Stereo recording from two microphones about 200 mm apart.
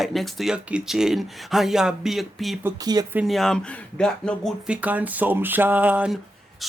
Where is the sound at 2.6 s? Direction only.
20° right (ahead or behind).